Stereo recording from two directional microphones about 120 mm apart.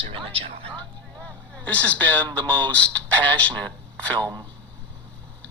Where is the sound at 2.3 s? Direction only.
10° left (ahead or behind).